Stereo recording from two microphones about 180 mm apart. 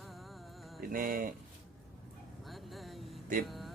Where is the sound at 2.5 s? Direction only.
Centre (ahead or behind).